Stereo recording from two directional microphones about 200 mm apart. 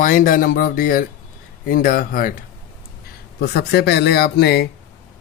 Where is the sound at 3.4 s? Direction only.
55° left (ahead or behind).